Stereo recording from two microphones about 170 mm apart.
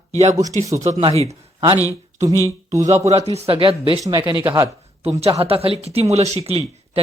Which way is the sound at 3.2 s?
35° right (ahead or behind).